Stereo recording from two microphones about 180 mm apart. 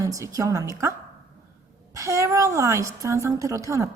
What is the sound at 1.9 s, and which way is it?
A woman's voice, 15° right (ahead or behind).